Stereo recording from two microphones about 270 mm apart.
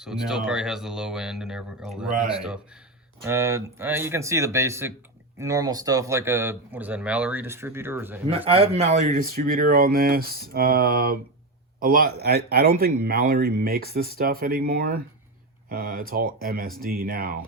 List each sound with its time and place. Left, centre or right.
0.0 s speech: centre
8.3 s speech: right